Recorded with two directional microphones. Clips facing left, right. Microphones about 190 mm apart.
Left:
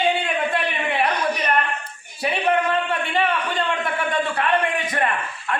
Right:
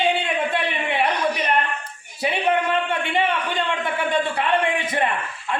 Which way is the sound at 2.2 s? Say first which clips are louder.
Even; 25° right (ahead or behind).